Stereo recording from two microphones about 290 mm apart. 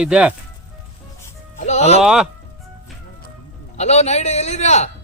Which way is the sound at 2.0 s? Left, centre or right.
Centre.